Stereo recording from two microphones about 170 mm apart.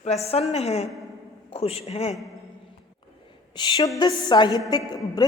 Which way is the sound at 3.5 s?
25° left (ahead or behind).